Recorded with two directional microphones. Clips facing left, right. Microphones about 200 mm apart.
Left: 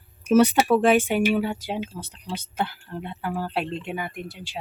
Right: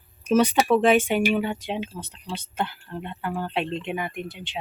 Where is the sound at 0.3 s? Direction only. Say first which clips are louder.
Left 2 dB; 10° left (ahead or behind).